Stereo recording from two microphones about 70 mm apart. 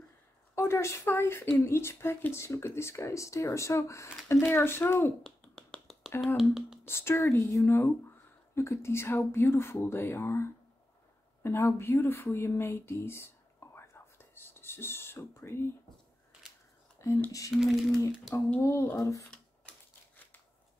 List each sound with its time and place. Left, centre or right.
0.6 s speech: left
4.3 s speech: left
5.2 s finger snapping: centre
6.2 s speech: centre
6.8 s speech: left
17.0 s a sound: left
17.6 s speech: centre
18.6 s speech: left